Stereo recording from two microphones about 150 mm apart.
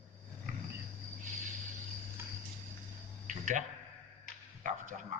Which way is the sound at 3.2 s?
60° right (ahead or behind).